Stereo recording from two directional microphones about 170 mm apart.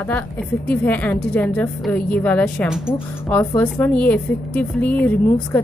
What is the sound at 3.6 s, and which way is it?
A woman's voice, 10° left (ahead or behind).